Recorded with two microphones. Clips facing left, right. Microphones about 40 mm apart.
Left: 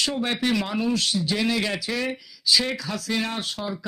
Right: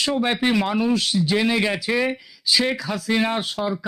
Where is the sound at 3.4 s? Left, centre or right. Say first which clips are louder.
Right 5 dB; centre.